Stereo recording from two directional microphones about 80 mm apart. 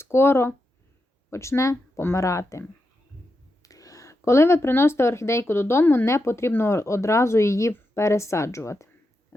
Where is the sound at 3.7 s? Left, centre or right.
Left.